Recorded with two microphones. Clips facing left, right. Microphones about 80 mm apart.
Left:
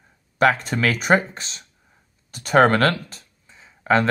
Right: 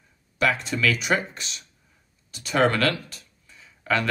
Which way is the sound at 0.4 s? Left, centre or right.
Left.